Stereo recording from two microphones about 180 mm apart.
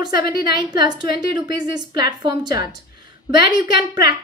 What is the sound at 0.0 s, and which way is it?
A woman's voice, 25° right (ahead or behind).